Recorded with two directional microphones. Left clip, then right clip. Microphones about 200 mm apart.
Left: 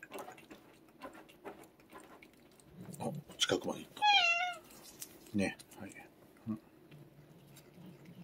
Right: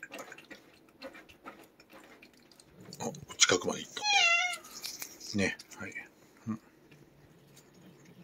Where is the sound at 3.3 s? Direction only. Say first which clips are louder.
Right 7 dB; 15° right (ahead or behind).